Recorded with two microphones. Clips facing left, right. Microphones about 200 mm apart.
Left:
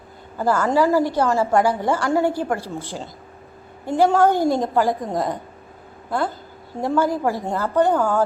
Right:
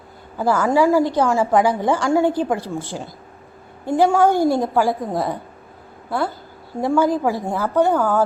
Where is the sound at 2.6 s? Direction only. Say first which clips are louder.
Right 3 dB; 15° left (ahead or behind).